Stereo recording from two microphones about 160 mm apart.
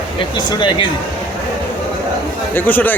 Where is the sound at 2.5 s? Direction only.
10° left (ahead or behind).